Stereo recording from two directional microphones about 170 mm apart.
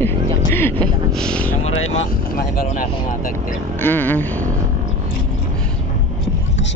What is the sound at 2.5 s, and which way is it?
Speech, 50° left (ahead or behind).